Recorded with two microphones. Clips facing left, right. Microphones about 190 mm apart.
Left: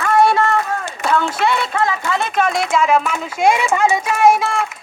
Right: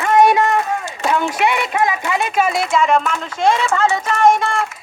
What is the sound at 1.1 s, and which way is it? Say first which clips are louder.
Speech: even; 15° right (ahead or behind).